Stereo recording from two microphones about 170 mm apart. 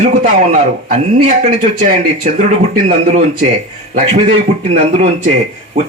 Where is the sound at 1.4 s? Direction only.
50° right (ahead or behind).